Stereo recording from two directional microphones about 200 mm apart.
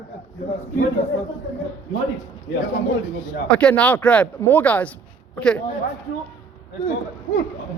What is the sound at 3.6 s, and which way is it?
Speech, 5° left (ahead or behind).